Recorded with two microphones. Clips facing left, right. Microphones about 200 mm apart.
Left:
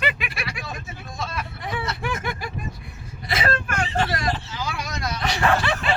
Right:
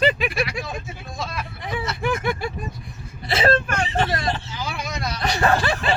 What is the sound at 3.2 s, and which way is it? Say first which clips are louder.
Vehicle: right 5 dB; 30° right (ahead or behind).